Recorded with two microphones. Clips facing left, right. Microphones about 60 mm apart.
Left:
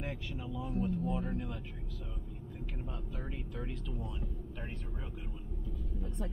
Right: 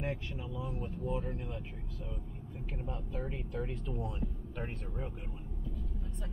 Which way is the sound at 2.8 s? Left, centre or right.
Centre.